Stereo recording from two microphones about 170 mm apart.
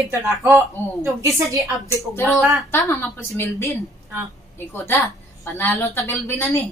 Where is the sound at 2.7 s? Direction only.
15° left (ahead or behind).